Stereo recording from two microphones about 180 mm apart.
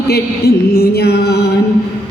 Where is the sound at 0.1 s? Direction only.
60° left (ahead or behind).